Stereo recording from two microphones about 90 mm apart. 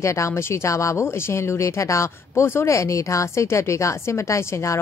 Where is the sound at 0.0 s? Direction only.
35° left (ahead or behind).